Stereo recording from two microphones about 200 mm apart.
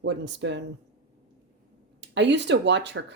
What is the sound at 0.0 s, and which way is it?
Speech, 60° right (ahead or behind).